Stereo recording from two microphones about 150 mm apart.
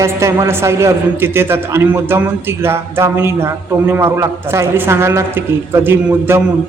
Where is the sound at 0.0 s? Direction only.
20° right (ahead or behind).